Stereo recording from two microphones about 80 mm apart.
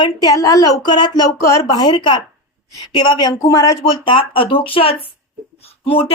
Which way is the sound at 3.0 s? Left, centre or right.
Left.